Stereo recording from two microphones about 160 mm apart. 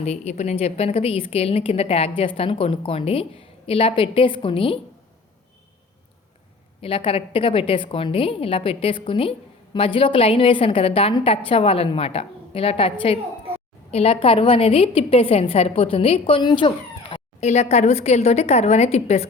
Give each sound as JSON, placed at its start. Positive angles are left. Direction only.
{"t": 0.0, "sound": "a woman's voice", "side_deg": 45}
{"t": 6.8, "sound": "a woman's voice", "side_deg": 35}